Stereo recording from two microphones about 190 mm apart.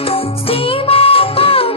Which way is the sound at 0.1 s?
30° left (ahead or behind).